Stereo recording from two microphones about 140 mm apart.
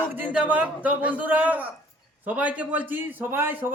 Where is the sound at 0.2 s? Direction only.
10° right (ahead or behind).